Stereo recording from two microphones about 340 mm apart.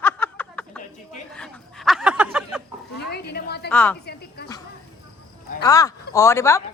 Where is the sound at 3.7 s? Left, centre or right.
Centre.